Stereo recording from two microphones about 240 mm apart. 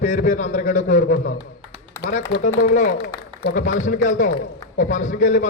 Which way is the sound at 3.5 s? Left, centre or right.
Left.